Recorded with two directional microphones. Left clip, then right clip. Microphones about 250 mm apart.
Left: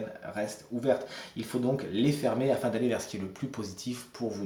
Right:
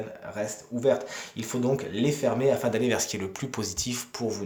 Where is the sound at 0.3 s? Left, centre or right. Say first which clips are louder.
Right 3 dB; right.